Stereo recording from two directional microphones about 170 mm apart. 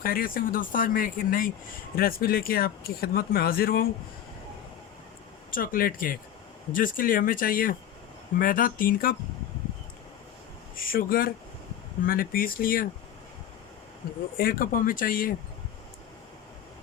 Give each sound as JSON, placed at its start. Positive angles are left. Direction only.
{"t": 0.0, "sound": "speech", "side_deg": 60}
{"t": 5.5, "sound": "speech", "side_deg": 55}
{"t": 10.8, "sound": "speech", "side_deg": 55}
{"t": 14.3, "sound": "speech", "side_deg": 60}